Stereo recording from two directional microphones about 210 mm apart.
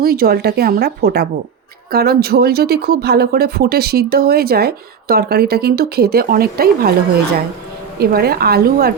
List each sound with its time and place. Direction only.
0.0 s speech: 45° right (ahead or behind)
7.9 s speech: 45° right (ahead or behind)